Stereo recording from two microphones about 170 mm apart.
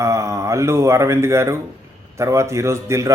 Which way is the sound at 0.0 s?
15° right (ahead or behind).